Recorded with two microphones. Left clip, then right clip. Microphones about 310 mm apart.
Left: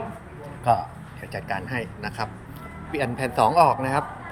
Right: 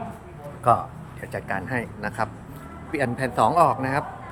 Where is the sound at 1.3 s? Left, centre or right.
Centre.